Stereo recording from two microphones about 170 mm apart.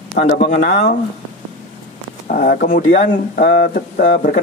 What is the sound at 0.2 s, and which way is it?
Speech, 60° left (ahead or behind).